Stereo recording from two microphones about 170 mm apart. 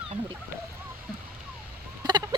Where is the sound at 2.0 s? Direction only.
25° right (ahead or behind).